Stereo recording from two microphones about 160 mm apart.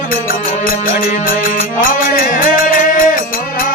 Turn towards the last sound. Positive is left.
turn(degrees=60)  # may be behind; listen again after turning